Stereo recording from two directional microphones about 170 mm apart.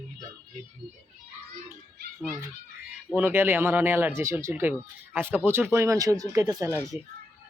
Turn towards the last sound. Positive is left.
turn(degrees=-20)  # may be behind; listen again after turning